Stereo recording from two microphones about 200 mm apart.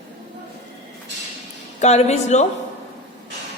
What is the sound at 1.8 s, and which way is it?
Speech, 35° left (ahead or behind).